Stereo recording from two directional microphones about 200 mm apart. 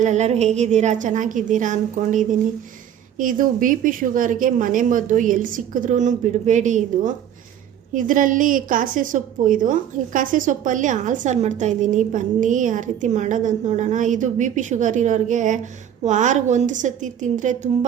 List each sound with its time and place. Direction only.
0.0 s a woman's voice: 35° right (ahead or behind)